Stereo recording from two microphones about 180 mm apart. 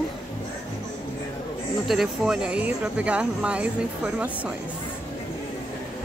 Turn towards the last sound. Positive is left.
turn(degrees=-10)  # may be behind; listen again after turning